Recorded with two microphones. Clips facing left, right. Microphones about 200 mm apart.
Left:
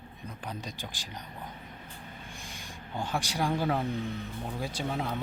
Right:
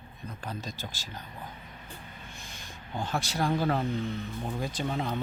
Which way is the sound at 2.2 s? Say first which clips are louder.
Left 2 dB; 15° left (ahead or behind).